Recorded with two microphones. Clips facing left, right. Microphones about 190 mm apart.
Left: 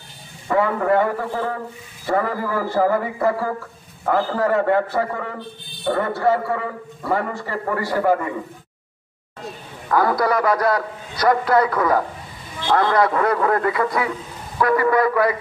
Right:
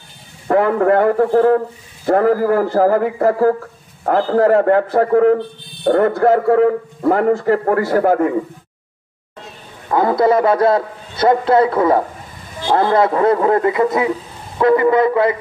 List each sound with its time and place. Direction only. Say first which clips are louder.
0.5 s a man's voice: right 5 dB; 55° right (ahead or behind)
9.8 s a man's voice: right 5 dB; 25° right (ahead or behind)